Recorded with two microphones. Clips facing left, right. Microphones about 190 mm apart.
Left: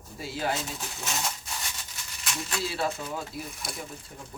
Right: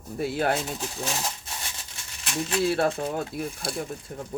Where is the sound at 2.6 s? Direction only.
55° right (ahead or behind).